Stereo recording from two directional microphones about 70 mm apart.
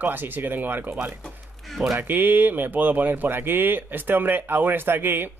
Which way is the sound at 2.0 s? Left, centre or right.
Right.